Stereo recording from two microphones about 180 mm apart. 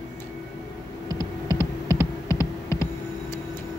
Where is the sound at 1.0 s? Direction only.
20° right (ahead or behind).